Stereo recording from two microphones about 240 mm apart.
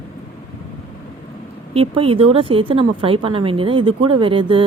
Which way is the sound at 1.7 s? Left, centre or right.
Right.